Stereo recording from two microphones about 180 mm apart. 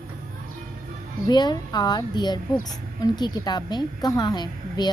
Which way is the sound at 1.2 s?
25° left (ahead or behind).